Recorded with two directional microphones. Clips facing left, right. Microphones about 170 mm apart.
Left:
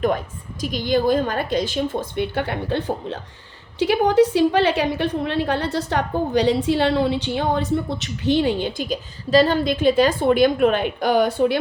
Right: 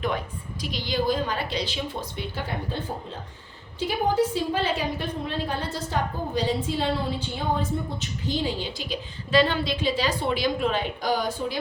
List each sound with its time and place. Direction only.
0.6 s a woman's voice: 50° left (ahead or behind); by 11.5 s 65° left (ahead or behind)